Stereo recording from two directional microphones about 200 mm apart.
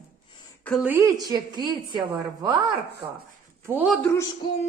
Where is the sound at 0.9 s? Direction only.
15° right (ahead or behind).